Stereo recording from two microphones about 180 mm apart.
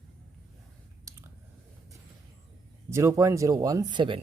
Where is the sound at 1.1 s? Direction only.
20° right (ahead or behind).